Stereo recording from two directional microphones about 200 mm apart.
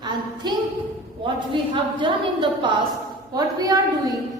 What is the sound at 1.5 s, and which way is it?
A woman's voice, 25° right (ahead or behind).